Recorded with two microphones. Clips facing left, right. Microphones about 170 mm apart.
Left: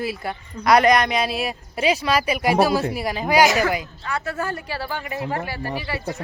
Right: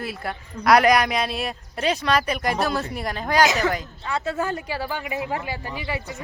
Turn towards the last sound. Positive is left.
turn(degrees=-15)  # may be behind; listen again after turning